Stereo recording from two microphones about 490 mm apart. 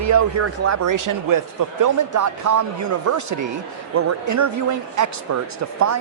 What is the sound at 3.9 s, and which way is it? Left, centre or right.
Speech, right.